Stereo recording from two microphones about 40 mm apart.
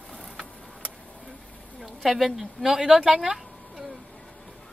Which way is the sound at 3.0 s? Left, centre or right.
Centre.